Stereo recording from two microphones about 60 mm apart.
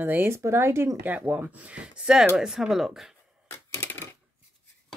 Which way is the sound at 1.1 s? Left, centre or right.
Right.